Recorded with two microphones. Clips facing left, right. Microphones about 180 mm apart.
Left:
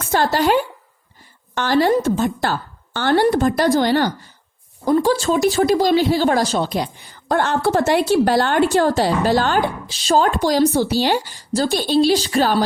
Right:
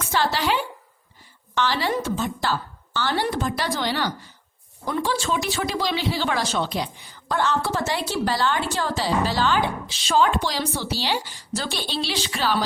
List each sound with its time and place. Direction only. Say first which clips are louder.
0.0 s a woman's voice: left 6 dB; 45° left (ahead or behind)